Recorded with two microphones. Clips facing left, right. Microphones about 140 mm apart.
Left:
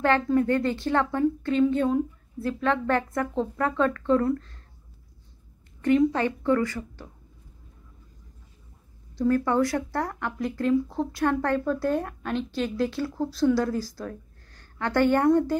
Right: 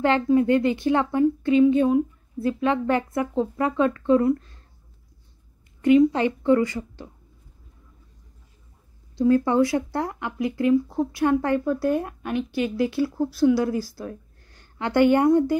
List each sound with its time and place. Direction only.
0.0 s speech: 15° right (ahead or behind)
5.8 s speech: 10° right (ahead or behind)
9.1 s a woman's voice: 20° right (ahead or behind)